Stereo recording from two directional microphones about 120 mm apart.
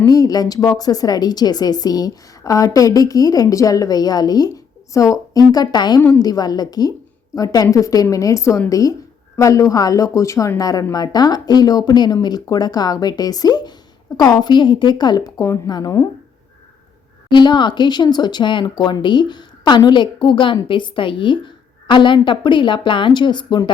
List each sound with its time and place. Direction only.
0.0 s a woman's voice: 30° left (ahead or behind)
17.2 s a woman's voice: 40° left (ahead or behind)